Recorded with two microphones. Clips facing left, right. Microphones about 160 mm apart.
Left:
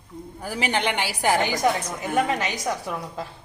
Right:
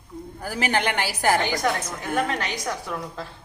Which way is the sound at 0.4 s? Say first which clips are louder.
Right 1 dB; 5° right (ahead or behind).